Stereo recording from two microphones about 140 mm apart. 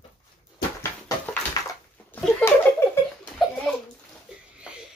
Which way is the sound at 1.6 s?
25° left (ahead or behind).